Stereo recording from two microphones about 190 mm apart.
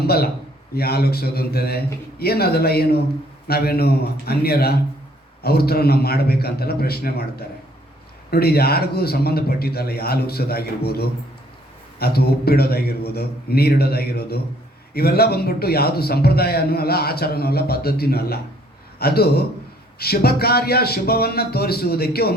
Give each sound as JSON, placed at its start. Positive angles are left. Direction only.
{"t": 0.0, "sound": "a man's voice", "side_deg": 55}